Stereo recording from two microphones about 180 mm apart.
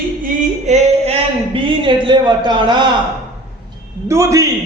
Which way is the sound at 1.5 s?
30° right (ahead or behind).